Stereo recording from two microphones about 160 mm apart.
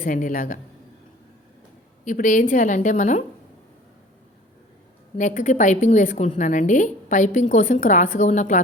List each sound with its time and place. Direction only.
0.0 s speech: 60° left (ahead or behind)
2.0 s a woman's voice: 55° left (ahead or behind)
5.1 s a woman's voice: 50° left (ahead or behind)